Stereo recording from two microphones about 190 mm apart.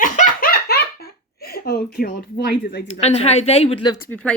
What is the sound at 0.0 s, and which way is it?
Belly laugh, 50° left (ahead or behind).